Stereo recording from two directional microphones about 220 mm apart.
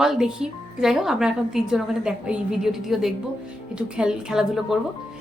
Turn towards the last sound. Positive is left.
turn(degrees=-5)  # may be behind; listen again after turning